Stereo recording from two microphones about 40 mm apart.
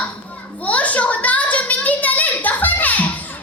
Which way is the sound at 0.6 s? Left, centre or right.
Left.